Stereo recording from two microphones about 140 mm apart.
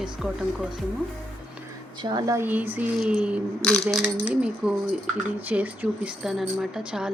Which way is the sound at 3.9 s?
5° right (ahead or behind).